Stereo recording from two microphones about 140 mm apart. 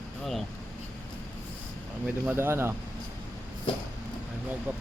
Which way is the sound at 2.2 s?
15° right (ahead or behind).